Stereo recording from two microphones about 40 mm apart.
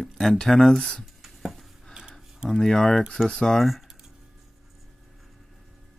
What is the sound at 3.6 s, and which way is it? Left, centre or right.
Speech, centre.